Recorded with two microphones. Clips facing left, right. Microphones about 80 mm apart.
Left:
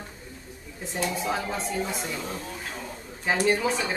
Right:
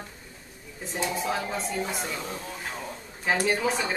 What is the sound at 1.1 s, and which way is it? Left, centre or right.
Speech, centre.